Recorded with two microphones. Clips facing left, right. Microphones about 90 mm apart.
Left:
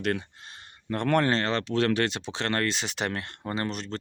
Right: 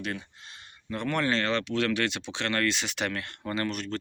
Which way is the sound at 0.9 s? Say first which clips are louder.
Left 6 dB; 50° left (ahead or behind).